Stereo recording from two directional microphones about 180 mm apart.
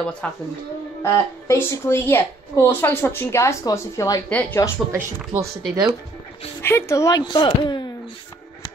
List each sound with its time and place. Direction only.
0.2 s a woman's voice: 5° left (ahead or behind)
4.9 s speech: 10° right (ahead or behind)
6.6 s speech: 15° left (ahead or behind)